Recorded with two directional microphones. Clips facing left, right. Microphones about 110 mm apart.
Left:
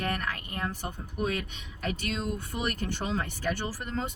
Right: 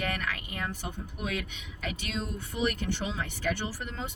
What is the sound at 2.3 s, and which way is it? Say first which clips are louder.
Speech: right 2 dB; 40° left (ahead or behind).